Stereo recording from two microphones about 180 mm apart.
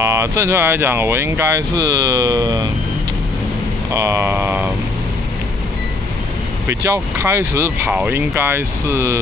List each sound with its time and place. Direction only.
0.0 s speech: 15° right (ahead or behind)
1.8 s speech: 75° right (ahead or behind)
2.4 s speech: 30° right (ahead or behind)
3.9 s speech: 15° right (ahead or behind)
6.7 s speech: 15° right (ahead or behind)